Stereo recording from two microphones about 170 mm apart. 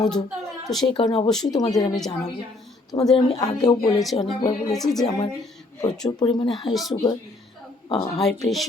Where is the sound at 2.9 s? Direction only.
30° left (ahead or behind).